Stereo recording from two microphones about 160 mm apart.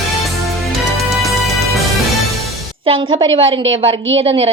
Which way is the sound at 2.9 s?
35° right (ahead or behind).